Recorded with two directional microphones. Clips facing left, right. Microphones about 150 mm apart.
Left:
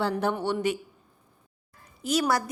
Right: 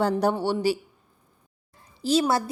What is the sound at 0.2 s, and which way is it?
Speech, 35° right (ahead or behind).